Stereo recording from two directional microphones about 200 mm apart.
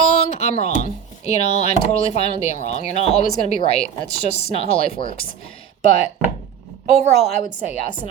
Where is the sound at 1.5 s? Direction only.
35° left (ahead or behind).